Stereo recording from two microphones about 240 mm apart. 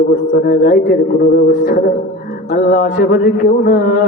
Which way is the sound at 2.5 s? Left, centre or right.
Left.